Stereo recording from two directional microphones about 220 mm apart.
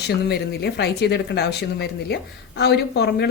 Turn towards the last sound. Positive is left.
turn(degrees=50)  # may be behind; listen again after turning